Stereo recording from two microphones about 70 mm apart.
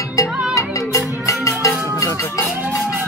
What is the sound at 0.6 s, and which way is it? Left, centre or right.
Music, left.